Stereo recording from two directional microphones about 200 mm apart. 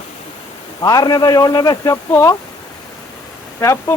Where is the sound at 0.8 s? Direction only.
20° left (ahead or behind).